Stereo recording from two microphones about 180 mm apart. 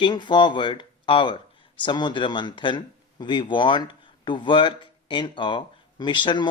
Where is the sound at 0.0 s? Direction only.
25° left (ahead or behind).